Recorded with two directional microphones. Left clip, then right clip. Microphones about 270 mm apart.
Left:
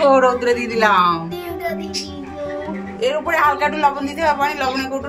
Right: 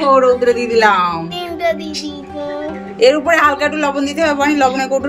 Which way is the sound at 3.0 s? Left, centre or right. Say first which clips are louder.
Right 5 dB; right.